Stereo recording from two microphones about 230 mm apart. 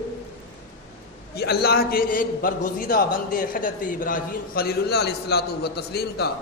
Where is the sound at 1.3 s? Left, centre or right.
Left.